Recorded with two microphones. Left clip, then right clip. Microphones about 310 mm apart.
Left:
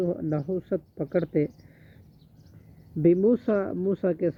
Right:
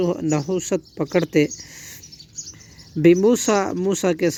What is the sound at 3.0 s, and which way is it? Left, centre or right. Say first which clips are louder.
Speech: right 6 dB; right.